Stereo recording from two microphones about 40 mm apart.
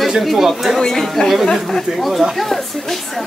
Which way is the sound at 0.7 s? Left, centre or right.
Centre.